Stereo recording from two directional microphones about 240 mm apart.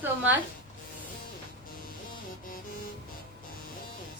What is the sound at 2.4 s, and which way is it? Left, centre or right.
Music, left.